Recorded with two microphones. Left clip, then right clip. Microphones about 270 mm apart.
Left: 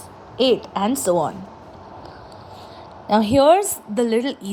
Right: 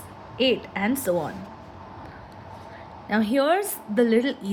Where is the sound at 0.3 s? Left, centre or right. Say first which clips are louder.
Left 5 dB; centre.